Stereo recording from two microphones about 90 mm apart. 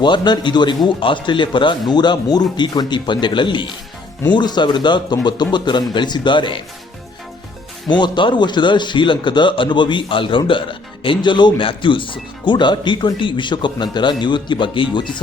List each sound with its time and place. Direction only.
0.0 s a man's voice: 55° left (ahead or behind)
7.9 s a man's voice: 60° left (ahead or behind)